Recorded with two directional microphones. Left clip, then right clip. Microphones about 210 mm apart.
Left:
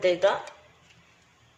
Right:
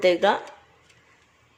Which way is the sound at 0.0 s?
45° right (ahead or behind).